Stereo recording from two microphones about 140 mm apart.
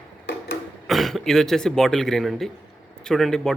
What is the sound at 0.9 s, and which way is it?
Speech, centre (ahead or behind).